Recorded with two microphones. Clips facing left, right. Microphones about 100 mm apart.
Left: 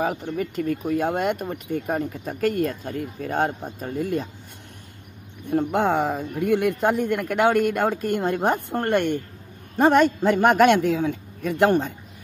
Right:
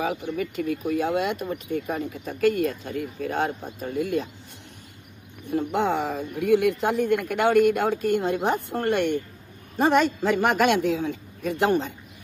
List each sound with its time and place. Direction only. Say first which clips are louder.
0.0 s speech: left 2 dB; 45° left (ahead or behind)
5.5 s speech: left 3 dB; 55° left (ahead or behind)